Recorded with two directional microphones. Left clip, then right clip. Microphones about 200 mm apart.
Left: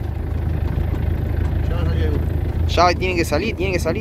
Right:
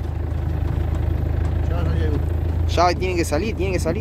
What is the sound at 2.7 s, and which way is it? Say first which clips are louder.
Speech: left 2 dB; 10° right (ahead or behind).